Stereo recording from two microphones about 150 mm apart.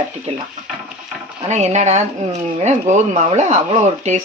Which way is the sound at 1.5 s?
50° right (ahead or behind).